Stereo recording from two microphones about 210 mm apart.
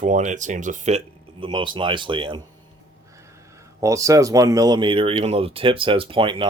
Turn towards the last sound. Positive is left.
turn(degrees=-25)  # may be behind; listen again after turning